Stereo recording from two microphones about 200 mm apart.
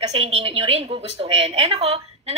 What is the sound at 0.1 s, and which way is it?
A woman's voice, 30° right (ahead or behind).